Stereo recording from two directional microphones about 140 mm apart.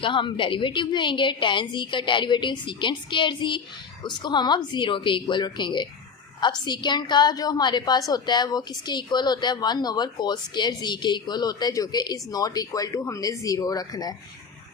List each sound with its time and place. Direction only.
0.0 s a woman's voice: 35° left (ahead or behind)